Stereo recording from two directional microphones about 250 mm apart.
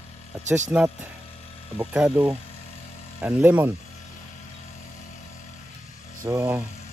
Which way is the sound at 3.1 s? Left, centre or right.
Centre.